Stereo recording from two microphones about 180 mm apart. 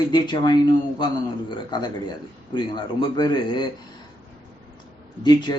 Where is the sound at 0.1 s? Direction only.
25° left (ahead or behind).